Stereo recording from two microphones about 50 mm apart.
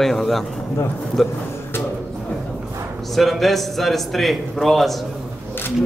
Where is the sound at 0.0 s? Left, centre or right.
Centre.